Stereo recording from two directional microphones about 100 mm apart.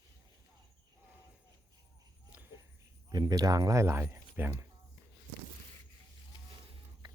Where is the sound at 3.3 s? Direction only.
35° right (ahead or behind); by 4.6 s 20° right (ahead or behind).